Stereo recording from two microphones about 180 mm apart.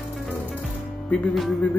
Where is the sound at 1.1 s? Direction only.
Centre (ahead or behind).